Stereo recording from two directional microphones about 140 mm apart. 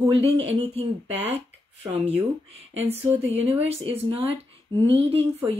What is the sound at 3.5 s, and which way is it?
Speech, 45° right (ahead or behind).